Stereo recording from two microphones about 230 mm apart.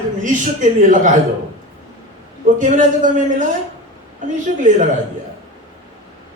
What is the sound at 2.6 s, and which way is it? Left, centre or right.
Speech, right.